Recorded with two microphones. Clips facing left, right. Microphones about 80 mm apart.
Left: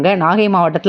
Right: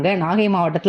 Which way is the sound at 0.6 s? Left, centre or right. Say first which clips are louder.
Left 5 dB; left.